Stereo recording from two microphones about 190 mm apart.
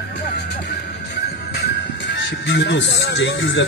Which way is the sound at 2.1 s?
65° left (ahead or behind).